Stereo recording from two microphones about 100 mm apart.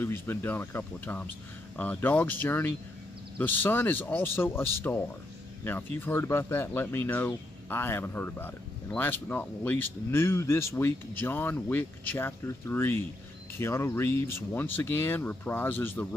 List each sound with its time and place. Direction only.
0.0 s speech: 25° left (ahead or behind)